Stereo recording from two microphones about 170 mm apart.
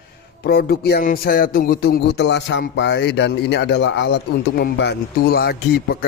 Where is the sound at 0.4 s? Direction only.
65° left (ahead or behind).